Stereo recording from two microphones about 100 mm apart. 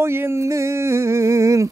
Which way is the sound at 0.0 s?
25° right (ahead or behind).